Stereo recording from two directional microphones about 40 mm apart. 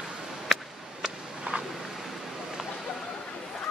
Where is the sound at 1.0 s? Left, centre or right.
Right.